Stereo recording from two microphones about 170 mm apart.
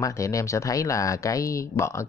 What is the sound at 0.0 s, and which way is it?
Speech, 20° left (ahead or behind).